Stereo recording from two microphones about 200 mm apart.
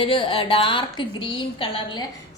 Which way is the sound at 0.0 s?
25° left (ahead or behind).